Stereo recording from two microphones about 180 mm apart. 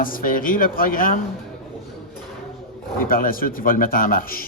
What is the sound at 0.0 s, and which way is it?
A man's voice, 50° left (ahead or behind).